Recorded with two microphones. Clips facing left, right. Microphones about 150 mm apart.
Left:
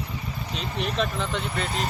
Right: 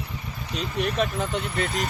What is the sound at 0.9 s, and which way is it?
Speech, 45° right (ahead or behind).